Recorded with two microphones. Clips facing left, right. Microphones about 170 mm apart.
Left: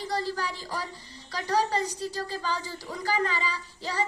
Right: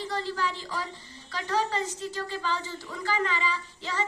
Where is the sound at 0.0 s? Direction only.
40° left (ahead or behind).